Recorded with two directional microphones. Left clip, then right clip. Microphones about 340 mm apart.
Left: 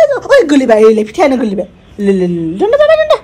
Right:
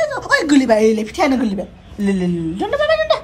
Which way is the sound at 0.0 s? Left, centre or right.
Centre.